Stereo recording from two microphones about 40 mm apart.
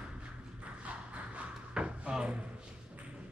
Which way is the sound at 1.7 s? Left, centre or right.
Right.